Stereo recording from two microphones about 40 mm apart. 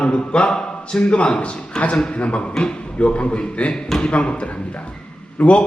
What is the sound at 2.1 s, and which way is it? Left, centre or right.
A man's voice, left.